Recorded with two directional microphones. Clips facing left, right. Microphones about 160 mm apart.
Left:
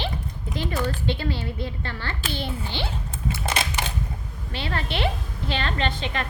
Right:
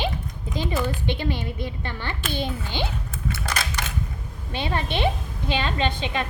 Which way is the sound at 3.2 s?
25° left (ahead or behind).